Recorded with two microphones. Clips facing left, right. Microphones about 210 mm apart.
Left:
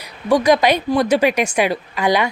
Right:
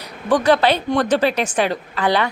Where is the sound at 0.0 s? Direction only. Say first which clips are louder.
Left 2 dB; 10° left (ahead or behind).